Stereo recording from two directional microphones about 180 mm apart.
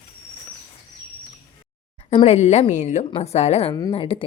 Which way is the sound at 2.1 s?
35° left (ahead or behind).